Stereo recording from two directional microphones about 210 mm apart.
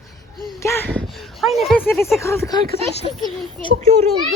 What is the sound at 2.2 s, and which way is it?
Speech, 15° left (ahead or behind).